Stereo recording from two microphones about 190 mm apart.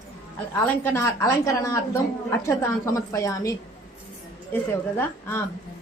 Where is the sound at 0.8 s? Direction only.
15° left (ahead or behind).